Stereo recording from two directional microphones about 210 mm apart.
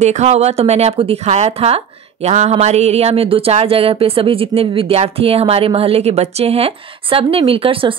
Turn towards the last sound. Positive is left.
turn(degrees=-25)  # may be behind; listen again after turning